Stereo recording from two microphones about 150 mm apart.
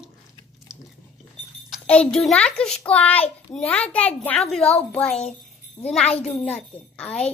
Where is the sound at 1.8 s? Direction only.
5° left (ahead or behind).